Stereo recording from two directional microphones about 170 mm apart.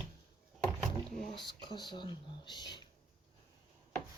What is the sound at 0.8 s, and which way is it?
Door, 5° left (ahead or behind).